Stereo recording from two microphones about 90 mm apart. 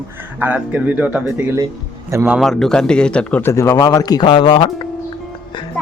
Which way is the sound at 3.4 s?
35° left (ahead or behind).